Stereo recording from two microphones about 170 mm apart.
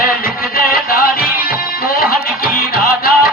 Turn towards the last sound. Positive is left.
turn(degrees=60)  # may be behind; listen again after turning